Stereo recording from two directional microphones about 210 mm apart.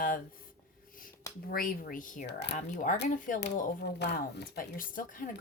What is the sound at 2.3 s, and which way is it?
Speech, 55° left (ahead or behind).